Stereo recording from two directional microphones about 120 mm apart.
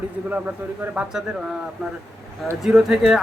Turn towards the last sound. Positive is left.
turn(degrees=-5)  # may be behind; listen again after turning